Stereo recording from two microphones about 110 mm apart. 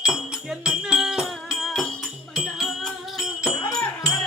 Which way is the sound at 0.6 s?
5° right (ahead or behind).